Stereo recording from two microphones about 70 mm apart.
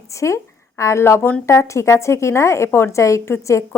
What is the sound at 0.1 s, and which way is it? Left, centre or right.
A woman's voice, left.